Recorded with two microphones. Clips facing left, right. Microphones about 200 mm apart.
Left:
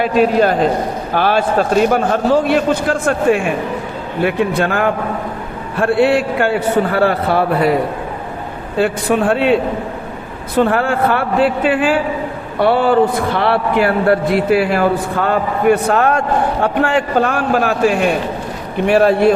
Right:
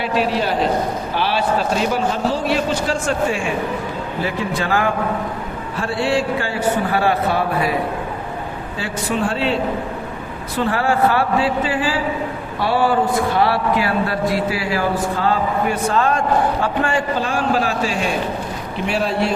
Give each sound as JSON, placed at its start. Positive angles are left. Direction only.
{"t": 0.0, "sound": "a man's voice", "side_deg": 45}
{"t": 8.8, "sound": "a man's voice", "side_deg": 55}
{"t": 10.6, "sound": "a man's voice", "side_deg": 55}